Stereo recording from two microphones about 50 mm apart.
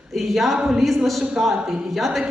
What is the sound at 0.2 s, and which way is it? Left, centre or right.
A woman's voice, centre.